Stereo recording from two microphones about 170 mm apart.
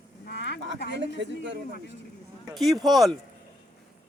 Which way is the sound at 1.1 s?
90° right.